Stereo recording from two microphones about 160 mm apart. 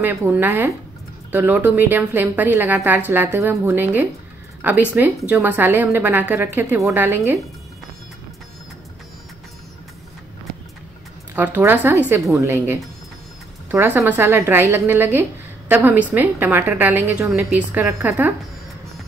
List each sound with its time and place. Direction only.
0.0 s a woman's voice: 15° right (ahead or behind)
11.3 s a woman's voice: 10° right (ahead or behind)